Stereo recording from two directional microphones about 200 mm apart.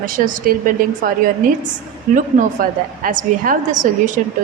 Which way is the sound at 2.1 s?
40° right (ahead or behind).